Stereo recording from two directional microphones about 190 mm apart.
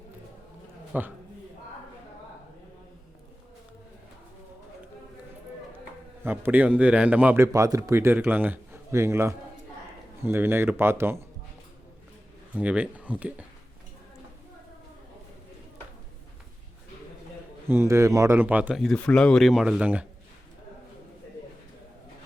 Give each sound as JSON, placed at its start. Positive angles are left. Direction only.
{"t": 0.9, "sound": "a man's voice", "side_deg": -10}
{"t": 6.2, "sound": "a man's voice", "side_deg": -10}
{"t": 12.5, "sound": "a man's voice", "side_deg": -5}
{"t": 17.7, "sound": "a man's voice", "side_deg": -15}